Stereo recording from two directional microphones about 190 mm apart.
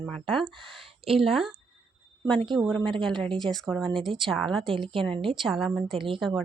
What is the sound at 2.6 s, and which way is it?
Speech, 5° left (ahead or behind).